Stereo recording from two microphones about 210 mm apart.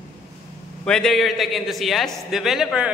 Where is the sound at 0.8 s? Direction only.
Centre (ahead or behind).